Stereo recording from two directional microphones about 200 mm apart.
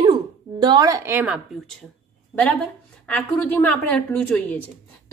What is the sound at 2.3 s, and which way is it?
A woman's voice, 5° left (ahead or behind).